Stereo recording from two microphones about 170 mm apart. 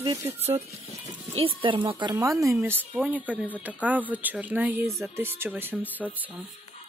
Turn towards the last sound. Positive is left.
turn(degrees=-10)  # may be behind; listen again after turning